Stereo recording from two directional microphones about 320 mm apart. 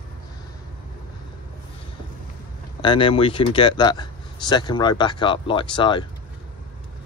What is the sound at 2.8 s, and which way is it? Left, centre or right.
Speech, centre.